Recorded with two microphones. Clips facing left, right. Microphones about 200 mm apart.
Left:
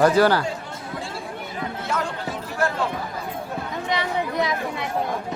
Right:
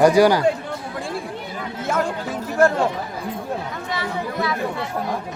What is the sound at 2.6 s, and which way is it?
Chatter, 45° right (ahead or behind).